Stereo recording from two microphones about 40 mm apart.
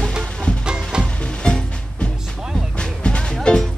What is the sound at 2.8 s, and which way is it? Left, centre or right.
Music, left.